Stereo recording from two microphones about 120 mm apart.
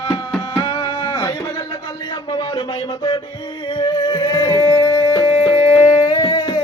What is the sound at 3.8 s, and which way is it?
Music, 35° left (ahead or behind).